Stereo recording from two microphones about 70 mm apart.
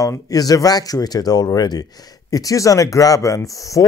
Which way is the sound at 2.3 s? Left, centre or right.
Left.